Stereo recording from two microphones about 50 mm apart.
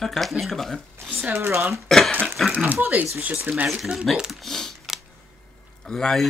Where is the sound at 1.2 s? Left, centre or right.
Right.